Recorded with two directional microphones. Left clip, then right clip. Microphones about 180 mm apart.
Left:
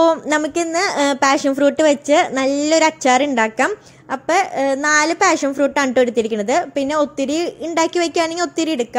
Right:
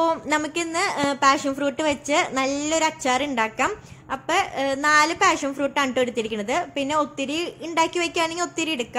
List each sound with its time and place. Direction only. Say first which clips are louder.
0.0 s speech: left 7 dB; 25° left (ahead or behind)